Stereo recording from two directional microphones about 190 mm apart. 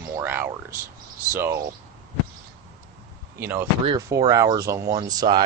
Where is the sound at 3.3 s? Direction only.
10° right (ahead or behind).